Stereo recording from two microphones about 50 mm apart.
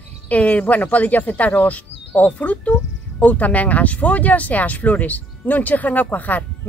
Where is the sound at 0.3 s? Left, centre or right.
Left.